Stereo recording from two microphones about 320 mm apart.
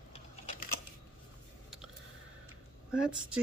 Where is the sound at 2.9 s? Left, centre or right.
Centre.